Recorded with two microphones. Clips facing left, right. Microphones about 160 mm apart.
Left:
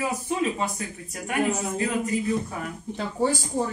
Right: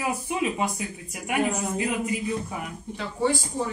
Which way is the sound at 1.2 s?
15° right (ahead or behind).